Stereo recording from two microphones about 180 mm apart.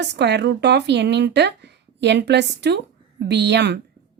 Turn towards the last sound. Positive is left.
turn(degrees=-70)  # may be behind; listen again after turning